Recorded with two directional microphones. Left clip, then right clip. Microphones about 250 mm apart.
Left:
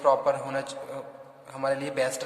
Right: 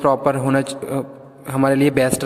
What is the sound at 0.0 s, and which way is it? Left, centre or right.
A man's voice, right.